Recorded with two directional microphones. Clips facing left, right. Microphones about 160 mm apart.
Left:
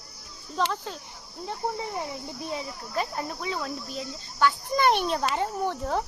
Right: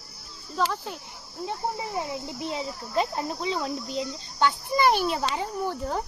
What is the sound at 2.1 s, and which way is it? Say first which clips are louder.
Speech: right 2 dB; 25° right (ahead or behind).